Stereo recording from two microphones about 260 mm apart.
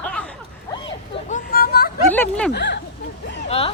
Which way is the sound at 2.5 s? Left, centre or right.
Left.